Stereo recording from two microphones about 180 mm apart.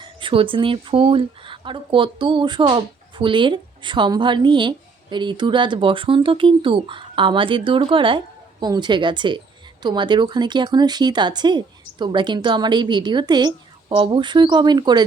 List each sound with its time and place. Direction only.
0.0 s speech: 30° right (ahead or behind)